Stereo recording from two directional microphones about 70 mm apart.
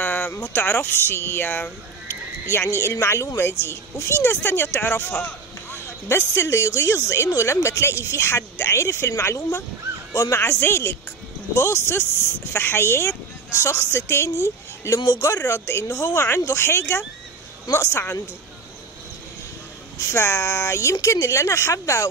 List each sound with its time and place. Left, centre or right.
0.0 s a sound: left
0.3 s speech: left
2.5 s speech: left
15.0 s speech: left
15.2 s speech: left
20.0 s speech: left